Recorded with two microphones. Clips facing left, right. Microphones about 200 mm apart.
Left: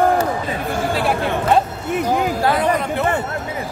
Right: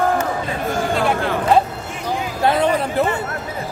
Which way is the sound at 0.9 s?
5° left (ahead or behind).